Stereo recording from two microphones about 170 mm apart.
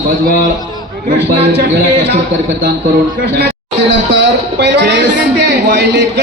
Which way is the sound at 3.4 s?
80° right.